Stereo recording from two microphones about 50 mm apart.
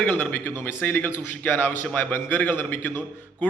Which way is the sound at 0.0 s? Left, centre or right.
Left.